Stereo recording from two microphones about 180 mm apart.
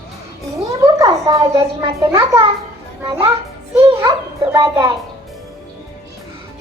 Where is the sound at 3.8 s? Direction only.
20° right (ahead or behind).